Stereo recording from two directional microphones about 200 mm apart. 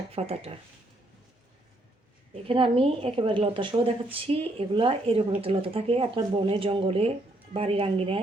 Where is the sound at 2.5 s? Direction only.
25° right (ahead or behind).